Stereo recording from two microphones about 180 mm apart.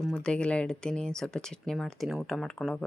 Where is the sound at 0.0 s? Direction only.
5° left (ahead or behind).